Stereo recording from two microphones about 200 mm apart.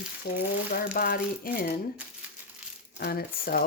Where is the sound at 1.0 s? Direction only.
45° left (ahead or behind).